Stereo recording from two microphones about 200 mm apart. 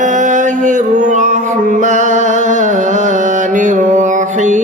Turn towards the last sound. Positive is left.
turn(degrees=-40)  # may be behind; listen again after turning